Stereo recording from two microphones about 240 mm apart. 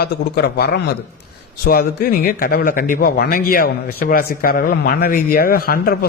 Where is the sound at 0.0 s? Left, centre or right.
Left.